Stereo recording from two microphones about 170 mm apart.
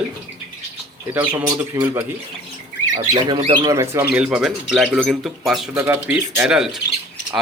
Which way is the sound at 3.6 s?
20° right (ahead or behind).